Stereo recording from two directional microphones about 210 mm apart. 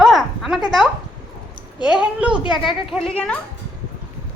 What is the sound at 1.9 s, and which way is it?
Speech, 5° right (ahead or behind).